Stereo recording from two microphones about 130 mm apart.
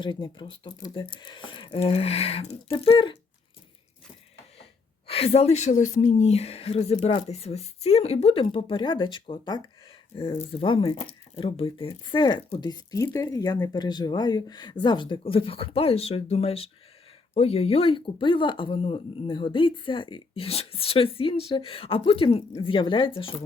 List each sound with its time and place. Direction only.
0.0 s speech: 35° left (ahead or behind)
5.0 s speech: 50° left (ahead or behind)
10.2 s speech: 45° left (ahead or behind)